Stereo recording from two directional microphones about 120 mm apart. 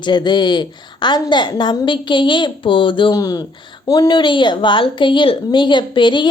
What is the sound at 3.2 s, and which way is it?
A woman's voice, 30° left (ahead or behind).